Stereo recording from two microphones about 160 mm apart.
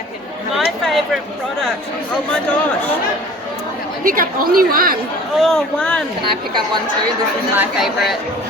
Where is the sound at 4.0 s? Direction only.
60° right (ahead or behind).